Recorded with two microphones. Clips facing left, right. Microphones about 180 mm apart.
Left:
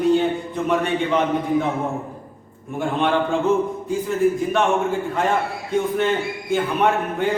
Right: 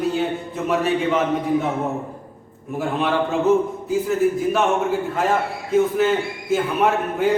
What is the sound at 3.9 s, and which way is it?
A man's voice, 5° right (ahead or behind).